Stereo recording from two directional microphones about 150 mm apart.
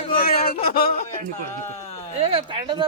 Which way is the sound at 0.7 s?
75° left (ahead or behind).